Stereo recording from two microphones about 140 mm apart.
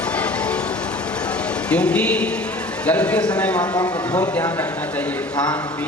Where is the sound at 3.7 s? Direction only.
25° left (ahead or behind).